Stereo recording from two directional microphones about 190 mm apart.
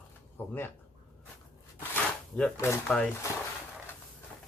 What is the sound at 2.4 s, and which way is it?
Speech, 15° left (ahead or behind).